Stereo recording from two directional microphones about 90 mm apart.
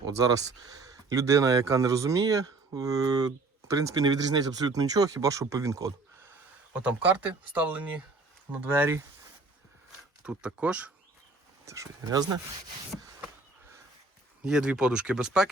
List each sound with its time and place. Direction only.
0.0 s speech: 40° right (ahead or behind)
6.7 s speech: 20° right (ahead or behind)
10.2 s speech: 10° right (ahead or behind)
11.6 s speech: 35° right (ahead or behind)
14.4 s speech: 10° right (ahead or behind)